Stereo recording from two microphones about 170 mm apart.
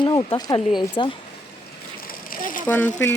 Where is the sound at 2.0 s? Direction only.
55° left (ahead or behind).